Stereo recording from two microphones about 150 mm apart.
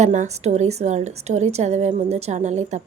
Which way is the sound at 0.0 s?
55° right (ahead or behind).